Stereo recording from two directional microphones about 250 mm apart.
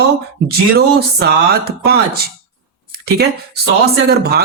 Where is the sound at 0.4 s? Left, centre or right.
Right.